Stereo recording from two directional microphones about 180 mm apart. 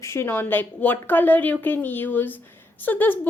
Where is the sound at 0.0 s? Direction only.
15° left (ahead or behind).